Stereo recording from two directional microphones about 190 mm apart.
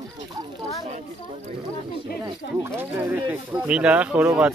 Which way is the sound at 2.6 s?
10° right (ahead or behind).